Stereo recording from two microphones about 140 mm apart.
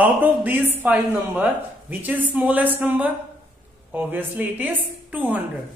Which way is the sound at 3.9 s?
10° right (ahead or behind).